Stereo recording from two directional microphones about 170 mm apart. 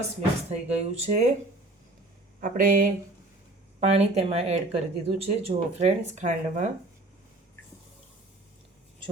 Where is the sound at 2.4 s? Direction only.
55° right (ahead or behind).